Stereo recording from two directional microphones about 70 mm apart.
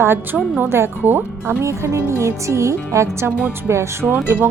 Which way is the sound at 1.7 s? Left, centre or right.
Right.